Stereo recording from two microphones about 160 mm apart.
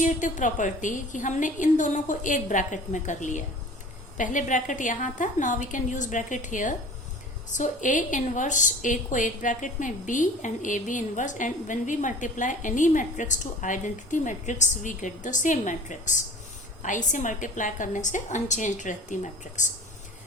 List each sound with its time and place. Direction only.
0.0 s a woman's voice: 50° left (ahead or behind)